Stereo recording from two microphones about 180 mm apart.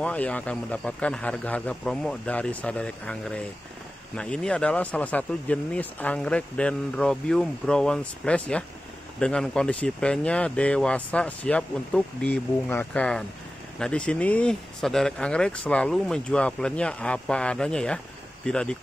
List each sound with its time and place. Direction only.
0.0 s speech: 5° left (ahead or behind)